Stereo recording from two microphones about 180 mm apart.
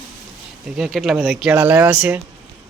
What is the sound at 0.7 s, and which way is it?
Speech, centre (ahead or behind).